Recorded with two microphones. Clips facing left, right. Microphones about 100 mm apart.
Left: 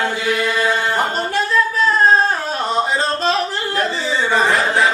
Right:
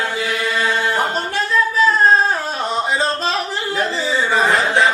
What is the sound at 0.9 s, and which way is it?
Singing, centre (ahead or behind).